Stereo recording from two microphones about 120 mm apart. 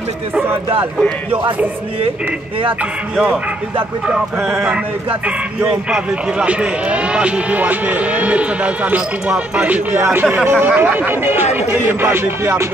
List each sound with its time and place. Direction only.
1.3 s a man's voice: 15° right (ahead or behind)
5.6 s a man's voice: 10° right (ahead or behind)
11.5 s music: 20° right (ahead or behind)